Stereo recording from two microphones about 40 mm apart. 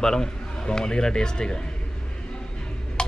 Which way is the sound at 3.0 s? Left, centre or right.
Left.